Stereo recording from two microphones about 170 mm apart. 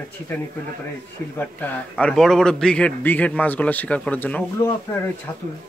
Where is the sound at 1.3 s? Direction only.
10° left (ahead or behind).